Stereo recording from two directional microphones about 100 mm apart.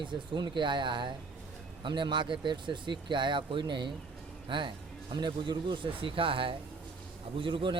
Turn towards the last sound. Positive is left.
turn(degrees=-55)  # may be behind; listen again after turning